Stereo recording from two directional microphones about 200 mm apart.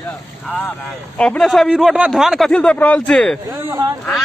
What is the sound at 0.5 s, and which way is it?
A man's voice, 5° left (ahead or behind).